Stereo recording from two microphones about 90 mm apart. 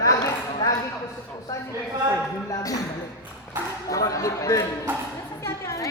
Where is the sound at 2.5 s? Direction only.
40° left (ahead or behind).